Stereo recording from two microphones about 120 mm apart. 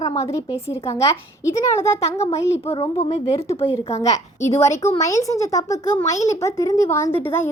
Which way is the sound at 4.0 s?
25° left (ahead or behind).